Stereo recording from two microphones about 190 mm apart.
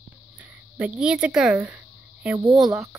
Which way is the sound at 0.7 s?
5° right (ahead or behind).